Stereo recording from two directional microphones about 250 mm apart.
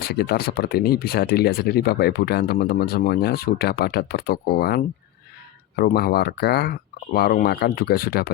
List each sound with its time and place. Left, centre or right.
0.0 s speech: left